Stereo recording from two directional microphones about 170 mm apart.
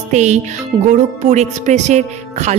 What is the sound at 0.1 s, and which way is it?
Speech, 45° right (ahead or behind).